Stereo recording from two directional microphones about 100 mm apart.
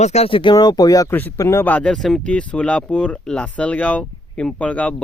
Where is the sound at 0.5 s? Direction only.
45° left (ahead or behind).